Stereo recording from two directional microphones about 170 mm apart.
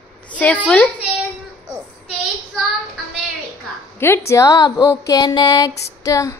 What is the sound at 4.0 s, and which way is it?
A woman's voice, 15° left (ahead or behind).